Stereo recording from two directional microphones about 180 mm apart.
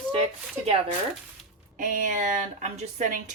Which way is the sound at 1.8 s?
45° right (ahead or behind).